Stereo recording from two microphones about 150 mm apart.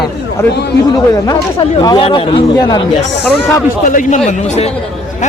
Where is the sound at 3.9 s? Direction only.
55° left (ahead or behind).